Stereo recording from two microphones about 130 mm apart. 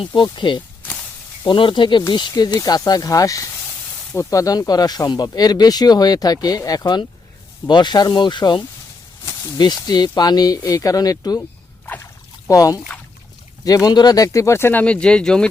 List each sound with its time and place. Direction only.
0.0 s speech: 35° left (ahead or behind)
12.5 s speech: 25° left (ahead or behind); by 15.4 s 5° left (ahead or behind)